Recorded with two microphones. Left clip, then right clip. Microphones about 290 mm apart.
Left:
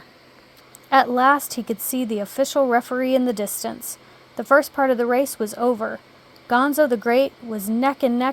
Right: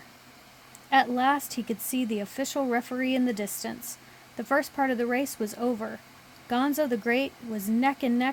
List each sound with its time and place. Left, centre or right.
0.9 s a woman's voice: centre